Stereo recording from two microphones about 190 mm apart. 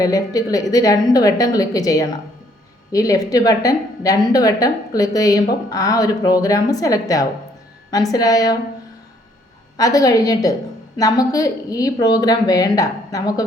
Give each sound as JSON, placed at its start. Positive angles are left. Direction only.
{"t": 0.0, "sound": "a woman's voice", "side_deg": 20}
{"t": 9.7, "sound": "a woman's voice", "side_deg": 20}